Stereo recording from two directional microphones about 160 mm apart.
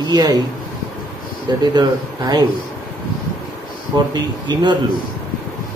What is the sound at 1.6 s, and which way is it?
Speech, 25° right (ahead or behind).